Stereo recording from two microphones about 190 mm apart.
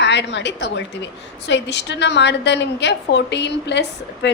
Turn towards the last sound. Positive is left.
turn(degrees=65)  # may be behind; listen again after turning